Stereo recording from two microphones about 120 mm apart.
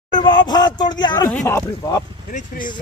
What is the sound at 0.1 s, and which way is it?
Speech, 35° left (ahead or behind).